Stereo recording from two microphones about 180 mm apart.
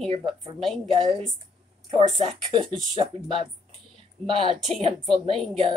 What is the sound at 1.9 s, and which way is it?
Speech, 30° right (ahead or behind).